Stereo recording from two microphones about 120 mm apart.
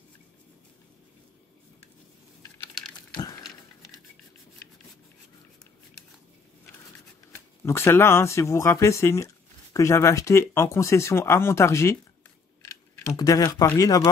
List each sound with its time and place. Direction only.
7.6 s speech: 20° left (ahead or behind)